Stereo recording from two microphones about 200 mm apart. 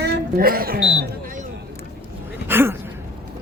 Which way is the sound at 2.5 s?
10° right (ahead or behind).